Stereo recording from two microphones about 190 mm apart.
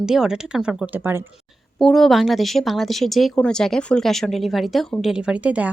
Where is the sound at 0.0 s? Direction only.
5° right (ahead or behind).